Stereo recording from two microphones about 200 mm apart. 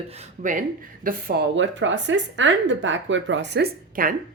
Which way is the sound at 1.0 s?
50° right (ahead or behind).